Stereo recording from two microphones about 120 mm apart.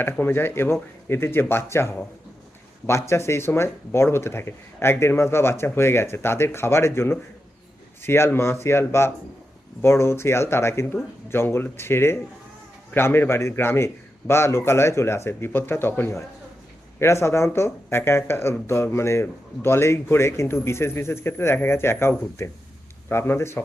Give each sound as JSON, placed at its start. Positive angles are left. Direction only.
{"t": 0.0, "sound": "speech", "side_deg": 20}